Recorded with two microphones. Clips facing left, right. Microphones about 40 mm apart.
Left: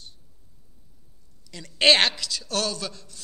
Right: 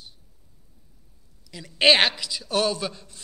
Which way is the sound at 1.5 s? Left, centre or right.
Centre.